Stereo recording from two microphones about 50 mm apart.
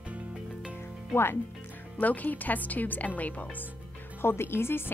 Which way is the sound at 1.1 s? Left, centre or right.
Left.